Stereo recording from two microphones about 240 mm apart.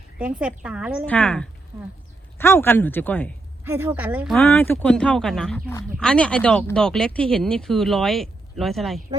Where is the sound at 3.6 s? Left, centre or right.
Centre.